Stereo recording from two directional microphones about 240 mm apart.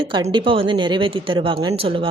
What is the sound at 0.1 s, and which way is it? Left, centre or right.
A woman's voice, centre.